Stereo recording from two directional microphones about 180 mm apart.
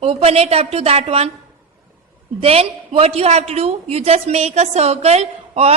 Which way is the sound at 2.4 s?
35° right (ahead or behind).